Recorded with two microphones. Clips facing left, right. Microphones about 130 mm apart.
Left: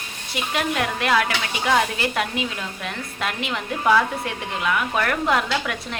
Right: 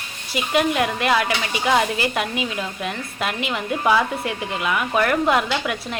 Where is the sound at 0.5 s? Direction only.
5° right (ahead or behind).